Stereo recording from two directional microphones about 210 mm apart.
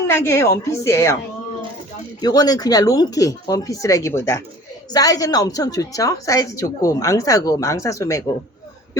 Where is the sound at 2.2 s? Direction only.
20° left (ahead or behind).